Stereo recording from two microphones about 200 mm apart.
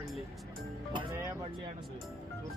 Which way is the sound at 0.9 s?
20° right (ahead or behind).